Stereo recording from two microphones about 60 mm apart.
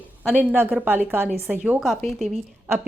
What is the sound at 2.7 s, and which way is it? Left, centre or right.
Speech, right.